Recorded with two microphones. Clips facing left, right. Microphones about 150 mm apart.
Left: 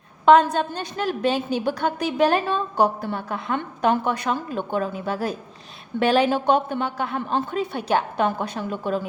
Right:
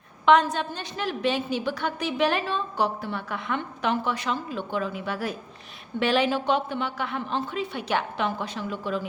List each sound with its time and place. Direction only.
0.3 s a woman's voice: 45° left (ahead or behind)